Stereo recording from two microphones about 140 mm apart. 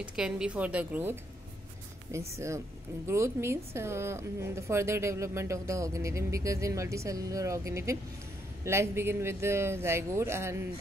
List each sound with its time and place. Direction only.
0.0 s speech: 5° right (ahead or behind)
2.1 s a woman's voice: 20° right (ahead or behind)